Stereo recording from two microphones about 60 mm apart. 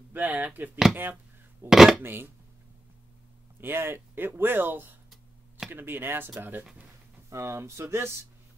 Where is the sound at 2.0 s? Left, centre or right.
Right.